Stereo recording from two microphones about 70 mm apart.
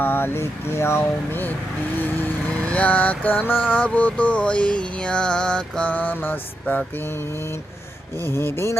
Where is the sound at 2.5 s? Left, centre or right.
Centre.